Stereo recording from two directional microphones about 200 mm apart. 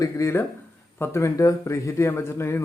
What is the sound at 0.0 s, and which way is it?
A man's voice, 15° left (ahead or behind).